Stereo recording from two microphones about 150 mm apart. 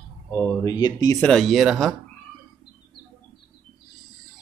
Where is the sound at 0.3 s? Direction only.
10° left (ahead or behind).